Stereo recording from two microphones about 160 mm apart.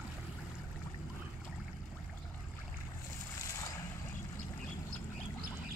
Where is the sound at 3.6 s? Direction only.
20° left (ahead or behind).